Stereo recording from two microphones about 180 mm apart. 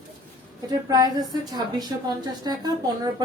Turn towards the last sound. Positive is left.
turn(degrees=-20)  # may be behind; listen again after turning